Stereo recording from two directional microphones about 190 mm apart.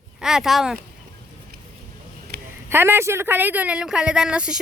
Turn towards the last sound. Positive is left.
turn(degrees=-5)  # may be behind; listen again after turning